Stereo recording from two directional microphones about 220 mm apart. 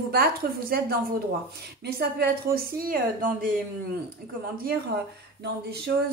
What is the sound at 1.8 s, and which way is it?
A woman's voice, 45° right (ahead or behind).